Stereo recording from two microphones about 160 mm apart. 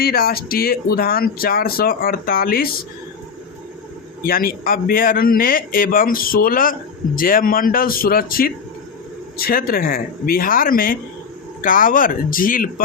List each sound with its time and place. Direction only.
0.0 s speech: 70° left (ahead or behind)
4.2 s a man's voice: 65° left (ahead or behind)